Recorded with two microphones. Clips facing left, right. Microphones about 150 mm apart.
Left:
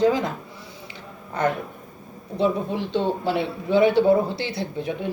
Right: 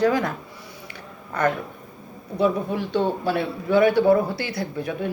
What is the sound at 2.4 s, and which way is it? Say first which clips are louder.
A woman's voice: right 1 dB; 25° left (ahead or behind).